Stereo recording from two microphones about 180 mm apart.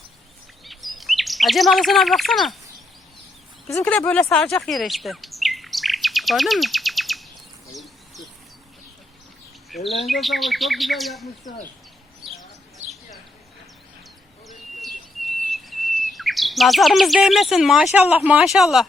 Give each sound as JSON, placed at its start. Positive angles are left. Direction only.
{"t": 0.6, "sound": "chirp", "side_deg": 0}
{"t": 3.7, "sound": "chirp", "side_deg": 10}
{"t": 7.8, "sound": "a sound", "side_deg": 0}
{"t": 9.6, "sound": "speech", "side_deg": 0}
{"t": 12.2, "sound": "bird", "side_deg": -30}
{"t": 12.8, "sound": "a sound", "side_deg": -40}
{"t": 14.4, "sound": "bird", "side_deg": 0}
{"t": 15.5, "sound": "chirp", "side_deg": 0}
{"t": 17.9, "sound": "speech", "side_deg": -10}